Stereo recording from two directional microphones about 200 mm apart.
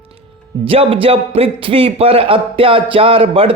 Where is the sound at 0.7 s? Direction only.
30° right (ahead or behind).